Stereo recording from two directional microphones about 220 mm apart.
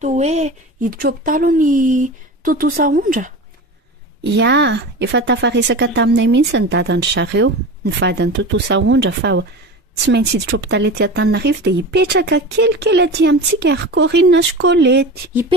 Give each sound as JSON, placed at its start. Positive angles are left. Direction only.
{"t": 0.0, "sound": "speech", "side_deg": -30}
{"t": 4.2, "sound": "speech", "side_deg": -55}